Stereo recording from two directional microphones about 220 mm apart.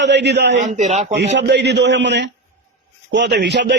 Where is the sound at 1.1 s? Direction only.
50° right (ahead or behind).